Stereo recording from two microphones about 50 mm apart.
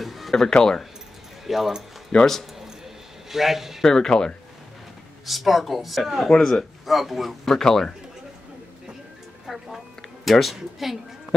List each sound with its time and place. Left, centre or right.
0.0 s speech: centre
1.5 s speech: centre
2.1 s a man's voice: centre
3.3 s speech: centre
3.8 s speech: centre
5.2 s speech: centre
9.5 s music: centre
10.2 s speech: centre